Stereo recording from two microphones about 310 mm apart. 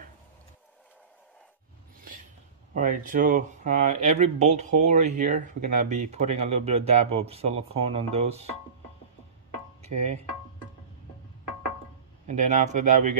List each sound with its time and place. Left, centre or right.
2.7 s speech: right
9.8 s music: right
12.3 s speech: right